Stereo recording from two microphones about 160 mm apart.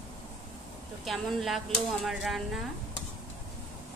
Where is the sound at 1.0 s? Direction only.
Centre (ahead or behind).